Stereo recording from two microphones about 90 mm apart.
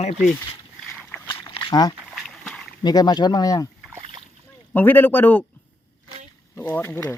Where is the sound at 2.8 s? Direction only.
50° left (ahead or behind).